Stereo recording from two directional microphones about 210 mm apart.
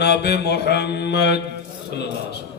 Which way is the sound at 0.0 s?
55° left (ahead or behind).